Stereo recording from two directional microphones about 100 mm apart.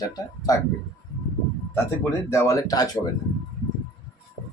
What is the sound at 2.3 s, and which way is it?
Speech, 35° left (ahead or behind).